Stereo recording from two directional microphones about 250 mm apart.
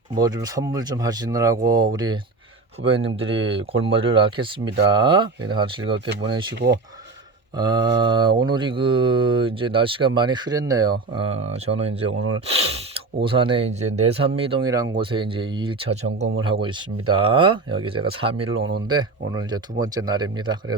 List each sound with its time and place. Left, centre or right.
0.2 s speech: centre
6.1 s speech: right
7.5 s speech: centre
12.1 s speech: right
12.5 s speech: right